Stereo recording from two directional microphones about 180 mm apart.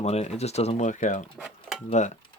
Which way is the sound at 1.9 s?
40° left (ahead or behind).